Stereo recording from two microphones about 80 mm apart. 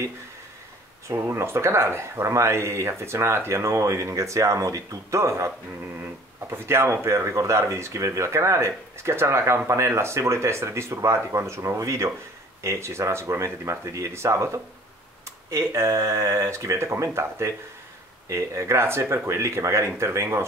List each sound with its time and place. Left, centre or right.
1.0 s speech: right
6.5 s speech: right